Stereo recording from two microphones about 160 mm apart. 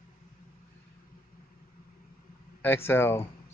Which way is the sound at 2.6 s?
15° left (ahead or behind).